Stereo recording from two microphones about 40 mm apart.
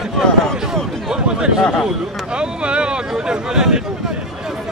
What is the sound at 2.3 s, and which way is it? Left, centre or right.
Speech, right.